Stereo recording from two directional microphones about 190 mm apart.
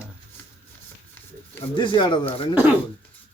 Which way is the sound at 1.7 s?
25° left (ahead or behind).